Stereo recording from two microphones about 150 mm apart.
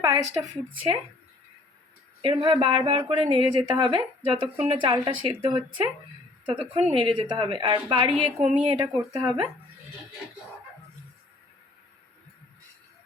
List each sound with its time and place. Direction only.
0.0 s a sound: 25° right (ahead or behind)
2.2 s a woman's voice: 35° right (ahead or behind)
8.5 s speech: 30° right (ahead or behind)